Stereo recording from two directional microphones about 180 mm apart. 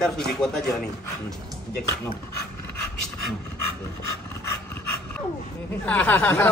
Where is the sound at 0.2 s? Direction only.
5° left (ahead or behind).